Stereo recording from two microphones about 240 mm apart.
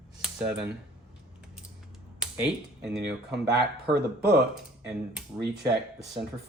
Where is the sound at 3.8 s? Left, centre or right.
Right.